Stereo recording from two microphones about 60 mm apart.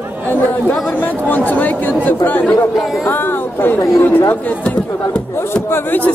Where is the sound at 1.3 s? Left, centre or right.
Left.